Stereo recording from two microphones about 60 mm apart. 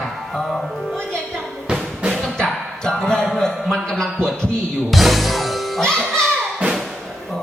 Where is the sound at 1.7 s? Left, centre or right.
Centre.